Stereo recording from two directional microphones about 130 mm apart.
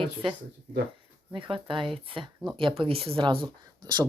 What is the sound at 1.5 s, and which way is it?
Speech, 40° right (ahead or behind).